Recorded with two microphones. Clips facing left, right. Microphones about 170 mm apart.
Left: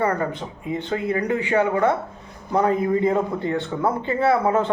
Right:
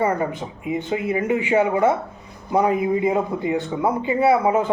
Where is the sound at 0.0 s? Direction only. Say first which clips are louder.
Right 1 dB; 15° right (ahead or behind).